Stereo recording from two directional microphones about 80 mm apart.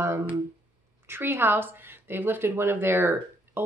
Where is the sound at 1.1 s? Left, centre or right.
Right.